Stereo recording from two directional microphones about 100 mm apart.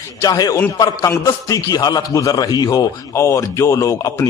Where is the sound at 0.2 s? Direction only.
40° left (ahead or behind).